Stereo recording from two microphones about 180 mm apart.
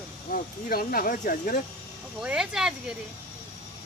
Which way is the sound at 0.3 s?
50° left (ahead or behind).